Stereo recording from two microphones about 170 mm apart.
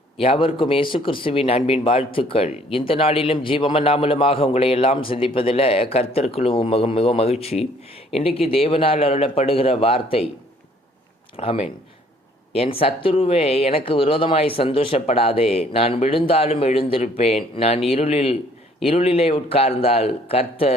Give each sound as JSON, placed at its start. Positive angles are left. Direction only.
{"t": 0.2, "sound": "a man's voice", "side_deg": 35}
{"t": 11.3, "sound": "a man's voice", "side_deg": 35}